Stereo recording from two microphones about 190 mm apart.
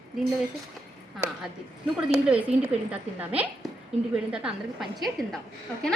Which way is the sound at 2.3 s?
5° right (ahead or behind).